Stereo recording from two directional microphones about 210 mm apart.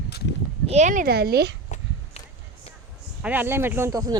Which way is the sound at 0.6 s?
35° right (ahead or behind).